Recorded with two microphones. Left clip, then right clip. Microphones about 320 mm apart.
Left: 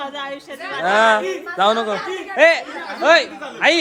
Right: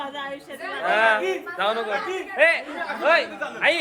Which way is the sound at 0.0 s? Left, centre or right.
Centre.